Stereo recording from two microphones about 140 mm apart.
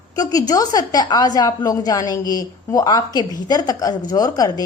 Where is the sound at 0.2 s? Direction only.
25° left (ahead or behind).